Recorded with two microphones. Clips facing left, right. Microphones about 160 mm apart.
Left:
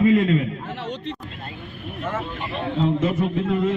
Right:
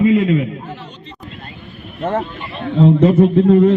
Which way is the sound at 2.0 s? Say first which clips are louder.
Right 9 dB; 60° right (ahead or behind).